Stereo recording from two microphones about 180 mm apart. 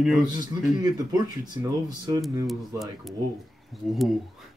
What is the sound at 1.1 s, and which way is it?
Speech, 20° right (ahead or behind).